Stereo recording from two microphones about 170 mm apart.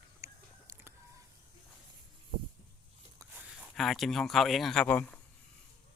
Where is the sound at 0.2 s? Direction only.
20° right (ahead or behind).